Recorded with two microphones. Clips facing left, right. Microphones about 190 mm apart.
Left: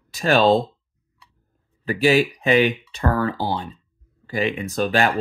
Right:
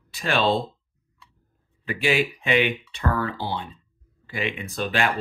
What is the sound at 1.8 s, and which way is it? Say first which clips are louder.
Speech: left 6 dB; 40° left (ahead or behind).